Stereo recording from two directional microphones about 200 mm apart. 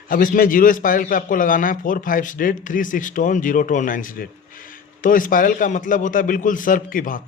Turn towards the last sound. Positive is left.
turn(degrees=45)  # may be behind; listen again after turning